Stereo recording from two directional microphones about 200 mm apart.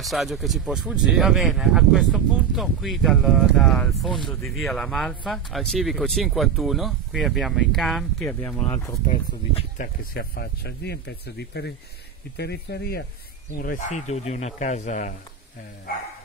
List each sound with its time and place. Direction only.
0.0 s speech: centre (ahead or behind)
9.0 s speech: 35° left (ahead or behind)
10.1 s speech: 50° left (ahead or behind)
13.6 s speech: 40° left (ahead or behind)